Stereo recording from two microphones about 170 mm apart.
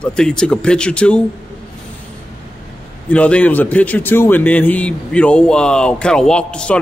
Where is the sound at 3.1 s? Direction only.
10° left (ahead or behind).